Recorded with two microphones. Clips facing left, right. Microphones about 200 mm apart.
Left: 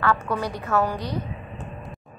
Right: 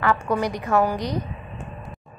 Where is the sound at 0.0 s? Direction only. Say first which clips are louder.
Right 2 dB; 15° right (ahead or behind).